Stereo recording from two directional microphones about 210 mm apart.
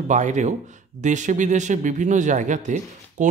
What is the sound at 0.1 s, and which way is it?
Speech, 35° right (ahead or behind).